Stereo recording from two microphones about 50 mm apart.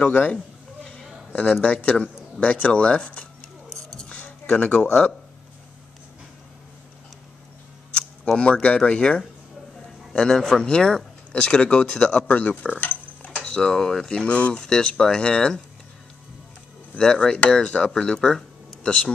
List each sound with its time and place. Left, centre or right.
0.0 s speech: left
1.6 s speech: left
3.7 s music: centre
4.6 s speech: left
8.4 s speech: left
10.1 s speech: centre
12.4 s speech: left
12.8 s a sound: left
13.4 s speech: centre
14.3 s speech: left
14.6 s speech: centre
17.0 s speech: centre